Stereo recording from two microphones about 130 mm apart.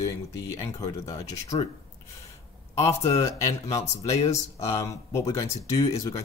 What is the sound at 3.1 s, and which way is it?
Speech, 25° left (ahead or behind).